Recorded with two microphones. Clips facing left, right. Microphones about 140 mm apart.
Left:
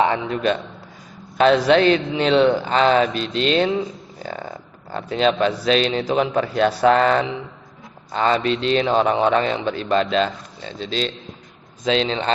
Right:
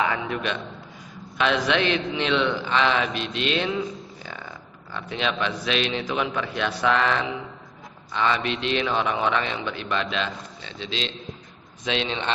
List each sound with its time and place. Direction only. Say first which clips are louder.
0.0 s speech: left 6 dB; 30° left (ahead or behind)